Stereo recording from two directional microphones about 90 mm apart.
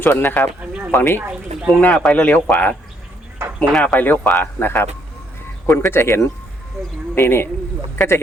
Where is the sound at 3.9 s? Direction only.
20° left (ahead or behind).